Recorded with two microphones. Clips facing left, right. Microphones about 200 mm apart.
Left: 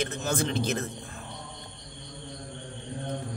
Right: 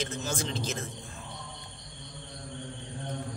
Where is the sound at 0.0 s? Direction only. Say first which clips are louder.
Left 4 dB; 60° left (ahead or behind).